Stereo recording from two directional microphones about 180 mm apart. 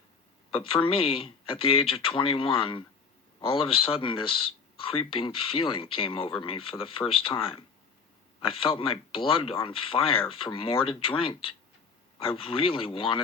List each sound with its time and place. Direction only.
0.5 s speech: 30° left (ahead or behind)